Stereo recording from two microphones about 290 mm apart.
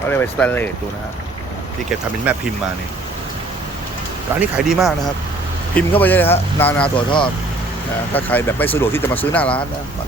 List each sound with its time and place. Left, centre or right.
0.1 s speech: centre
2.3 s speech: centre
4.4 s speech: centre
6.8 s speech: centre
8.1 s speech: centre